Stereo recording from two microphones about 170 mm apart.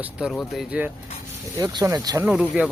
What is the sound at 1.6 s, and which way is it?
Speech, 20° right (ahead or behind).